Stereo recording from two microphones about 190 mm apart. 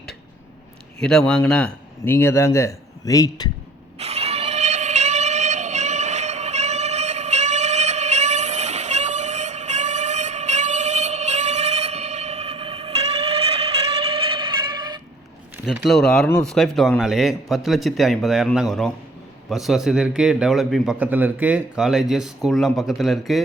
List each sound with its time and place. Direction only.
1.3 s a man's voice: 5° left (ahead or behind); by 3.5 s 20° left (ahead or behind)
3.9 s a sound: 35° right (ahead or behind)
15.5 s a man's voice: 5° right (ahead or behind)